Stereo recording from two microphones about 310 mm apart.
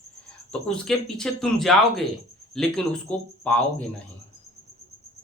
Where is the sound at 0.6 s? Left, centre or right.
Centre.